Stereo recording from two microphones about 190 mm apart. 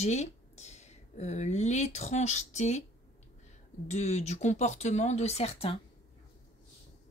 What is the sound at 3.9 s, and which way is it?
Speech, 35° left (ahead or behind).